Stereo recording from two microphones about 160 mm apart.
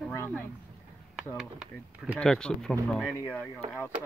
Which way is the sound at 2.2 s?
5° left (ahead or behind).